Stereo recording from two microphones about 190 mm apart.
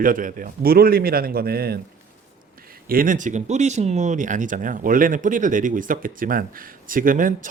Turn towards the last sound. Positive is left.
turn(degrees=-45)  # may be behind; listen again after turning